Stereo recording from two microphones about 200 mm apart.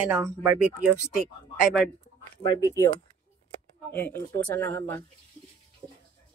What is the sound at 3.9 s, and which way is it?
Speech, 10° left (ahead or behind).